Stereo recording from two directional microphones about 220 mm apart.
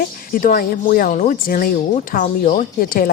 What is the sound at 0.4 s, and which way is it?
Speech, 40° left (ahead or behind).